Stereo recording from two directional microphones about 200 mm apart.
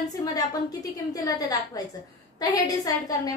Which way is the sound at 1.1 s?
20° left (ahead or behind).